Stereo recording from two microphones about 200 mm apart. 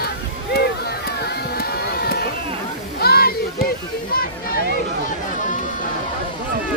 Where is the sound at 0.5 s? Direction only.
50° left (ahead or behind).